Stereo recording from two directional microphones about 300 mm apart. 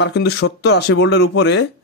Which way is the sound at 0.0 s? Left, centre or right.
Left.